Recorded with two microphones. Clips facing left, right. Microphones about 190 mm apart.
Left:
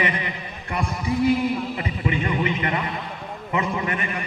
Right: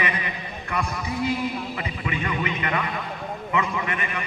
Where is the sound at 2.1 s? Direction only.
30° left (ahead or behind).